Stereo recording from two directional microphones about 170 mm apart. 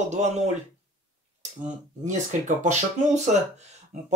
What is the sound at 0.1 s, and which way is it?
Speech, 40° right (ahead or behind).